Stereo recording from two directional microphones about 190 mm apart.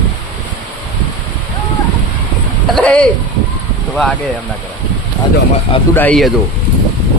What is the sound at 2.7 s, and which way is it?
A man's voice, 5° left (ahead or behind).